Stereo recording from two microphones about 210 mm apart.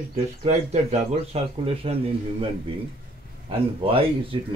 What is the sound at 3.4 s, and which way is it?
Speech, 25° right (ahead or behind).